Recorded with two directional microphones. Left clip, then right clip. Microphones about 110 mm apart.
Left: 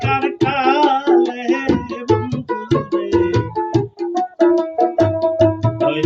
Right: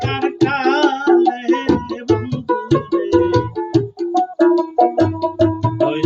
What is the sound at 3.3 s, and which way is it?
Music, 25° right (ahead or behind).